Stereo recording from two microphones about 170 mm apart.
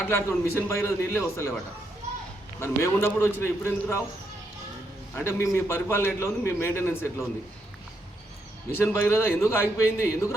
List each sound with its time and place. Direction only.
0.0 s a man's voice: 15° left (ahead or behind)
2.6 s a man's voice: 15° left (ahead or behind)
5.1 s a man's voice: 15° left (ahead or behind)
8.7 s a man's voice: 15° left (ahead or behind)